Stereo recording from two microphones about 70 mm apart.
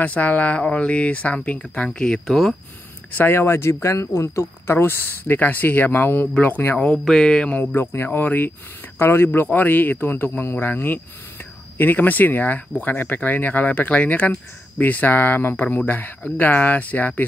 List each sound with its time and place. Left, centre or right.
0.0 s speech: left; by 2.5 s centre
3.1 s speech: left
6.9 s speech: centre
7.5 s speech: left